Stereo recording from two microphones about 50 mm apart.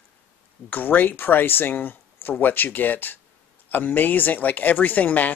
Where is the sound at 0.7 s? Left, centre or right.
Left.